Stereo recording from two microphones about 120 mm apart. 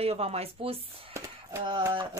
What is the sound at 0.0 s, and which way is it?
Speech, 60° right (ahead or behind).